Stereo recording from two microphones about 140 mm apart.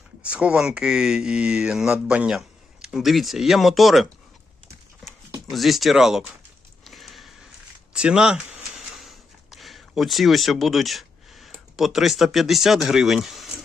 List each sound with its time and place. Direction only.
0.2 s speech: 10° right (ahead or behind)
5.5 s speech: centre (ahead or behind)
6.8 s a sound: centre (ahead or behind)